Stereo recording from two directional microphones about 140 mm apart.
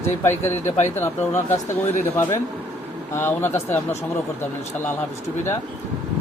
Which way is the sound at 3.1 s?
15° left (ahead or behind).